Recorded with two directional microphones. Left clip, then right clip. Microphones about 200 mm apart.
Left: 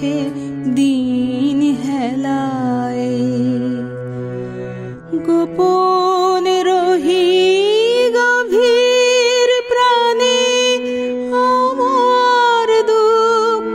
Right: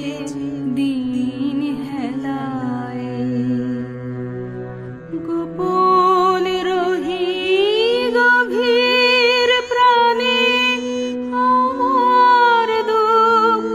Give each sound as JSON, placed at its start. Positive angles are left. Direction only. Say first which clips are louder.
{"t": 0.7, "sound": "music", "louder": "left 6 dB", "side_deg": 55}
{"t": 5.3, "sound": "music", "louder": "left 6 dB", "side_deg": 50}